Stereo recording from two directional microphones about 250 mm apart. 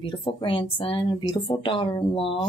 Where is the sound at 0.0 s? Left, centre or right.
Centre.